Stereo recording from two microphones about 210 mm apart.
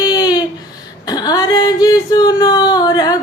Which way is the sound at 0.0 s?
20° left (ahead or behind).